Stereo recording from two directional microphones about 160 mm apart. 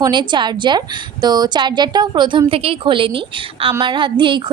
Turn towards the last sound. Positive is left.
turn(degrees=-30)  # may be behind; listen again after turning